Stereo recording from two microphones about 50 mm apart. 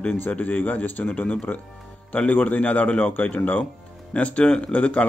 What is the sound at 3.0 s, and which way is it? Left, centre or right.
Speech, left.